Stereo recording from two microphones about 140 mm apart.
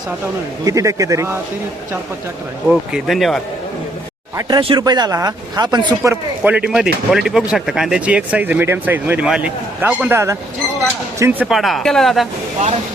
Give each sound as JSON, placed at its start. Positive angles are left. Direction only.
{"t": 0.6, "sound": "speech", "side_deg": -25}
{"t": 2.6, "sound": "speech", "side_deg": 0}
{"t": 4.4, "sound": "speech", "side_deg": -30}
{"t": 6.0, "sound": "speech", "side_deg": -15}
{"t": 11.4, "sound": "speech", "side_deg": 0}